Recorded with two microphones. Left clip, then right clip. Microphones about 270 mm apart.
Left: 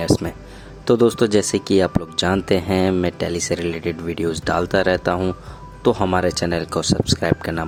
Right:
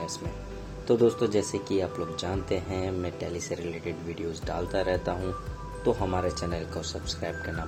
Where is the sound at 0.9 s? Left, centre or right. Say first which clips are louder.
Left 8 dB; left.